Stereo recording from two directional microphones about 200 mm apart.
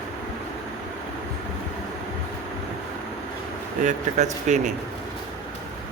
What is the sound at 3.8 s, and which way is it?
Speech, 35° right (ahead or behind).